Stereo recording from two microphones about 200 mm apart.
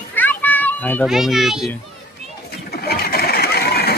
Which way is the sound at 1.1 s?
Centre (ahead or behind).